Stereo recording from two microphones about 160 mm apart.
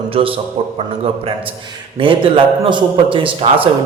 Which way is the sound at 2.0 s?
35° right (ahead or behind).